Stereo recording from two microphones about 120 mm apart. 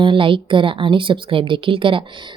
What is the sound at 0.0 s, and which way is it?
A woman's voice, 45° right (ahead or behind).